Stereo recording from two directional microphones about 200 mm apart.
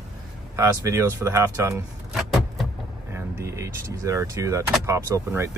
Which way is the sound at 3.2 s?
15° right (ahead or behind).